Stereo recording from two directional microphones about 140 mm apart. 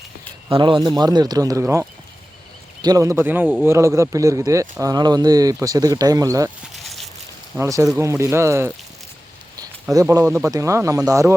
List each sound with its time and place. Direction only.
0.5 s speech: 35° right (ahead or behind)
1.6 s speech: 15° right (ahead or behind)
2.8 s speech: 25° right (ahead or behind)
6.7 s a sound: centre (ahead or behind)
7.6 s speech: 20° right (ahead or behind)
9.9 s speech: 25° right (ahead or behind)